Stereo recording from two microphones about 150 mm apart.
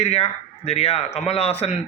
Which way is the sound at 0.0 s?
45° left (ahead or behind).